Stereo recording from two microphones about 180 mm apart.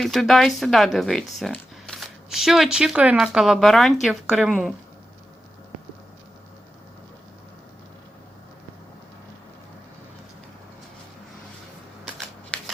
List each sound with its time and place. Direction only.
0.0 s speech: centre (ahead or behind)